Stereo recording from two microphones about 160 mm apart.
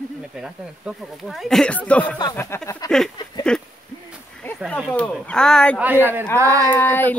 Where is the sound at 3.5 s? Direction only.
5° left (ahead or behind).